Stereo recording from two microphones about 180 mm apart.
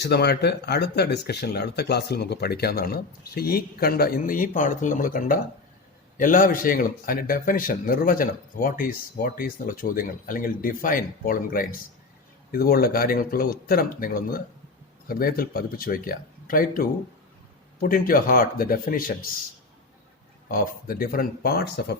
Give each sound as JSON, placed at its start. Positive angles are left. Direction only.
{"t": 0.0, "sound": "speech", "side_deg": 65}
{"t": 20.5, "sound": "speech", "side_deg": 55}